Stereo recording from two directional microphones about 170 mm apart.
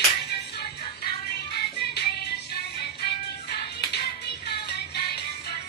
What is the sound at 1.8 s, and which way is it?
Music, 75° left (ahead or behind).